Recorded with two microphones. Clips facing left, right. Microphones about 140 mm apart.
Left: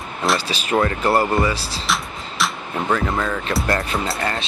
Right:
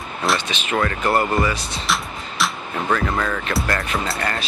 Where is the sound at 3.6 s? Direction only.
25° left (ahead or behind).